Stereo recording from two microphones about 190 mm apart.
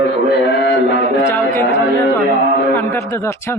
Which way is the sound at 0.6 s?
65° left (ahead or behind).